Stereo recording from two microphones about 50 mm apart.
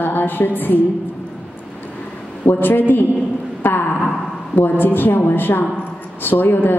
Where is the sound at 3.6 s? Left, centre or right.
Left.